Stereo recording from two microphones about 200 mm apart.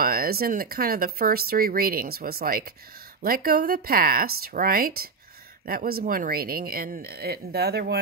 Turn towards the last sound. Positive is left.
turn(degrees=-50)  # may be behind; listen again after turning